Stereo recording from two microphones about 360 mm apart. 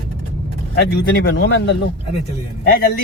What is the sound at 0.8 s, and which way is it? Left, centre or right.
Speech, left.